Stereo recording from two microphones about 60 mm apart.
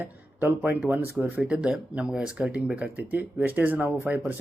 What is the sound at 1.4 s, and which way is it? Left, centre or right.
Speech, centre.